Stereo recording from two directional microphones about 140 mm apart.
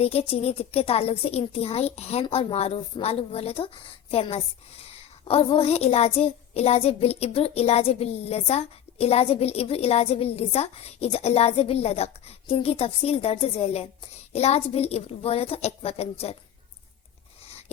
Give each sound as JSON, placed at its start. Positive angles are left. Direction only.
{"t": 0.0, "sound": "speech", "side_deg": 45}